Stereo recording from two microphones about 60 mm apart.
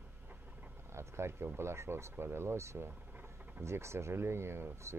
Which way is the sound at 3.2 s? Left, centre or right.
Right.